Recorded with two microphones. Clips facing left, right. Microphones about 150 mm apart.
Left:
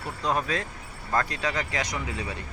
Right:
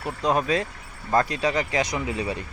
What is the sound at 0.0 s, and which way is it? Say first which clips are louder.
Speech: right 4 dB; 20° right (ahead or behind).